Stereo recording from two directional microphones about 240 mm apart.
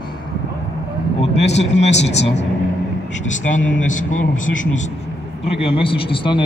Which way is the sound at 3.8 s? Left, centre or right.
Left.